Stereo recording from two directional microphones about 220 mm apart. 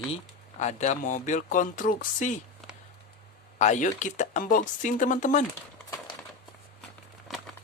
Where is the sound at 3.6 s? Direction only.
35° left (ahead or behind).